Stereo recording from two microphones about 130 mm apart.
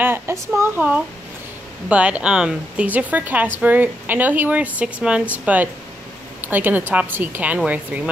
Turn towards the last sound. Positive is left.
turn(degrees=-10)  # may be behind; listen again after turning